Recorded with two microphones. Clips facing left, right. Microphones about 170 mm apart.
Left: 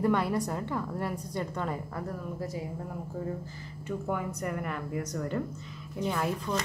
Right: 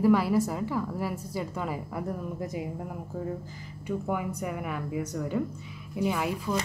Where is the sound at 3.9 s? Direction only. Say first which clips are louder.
Right 2 dB; 5° right (ahead or behind).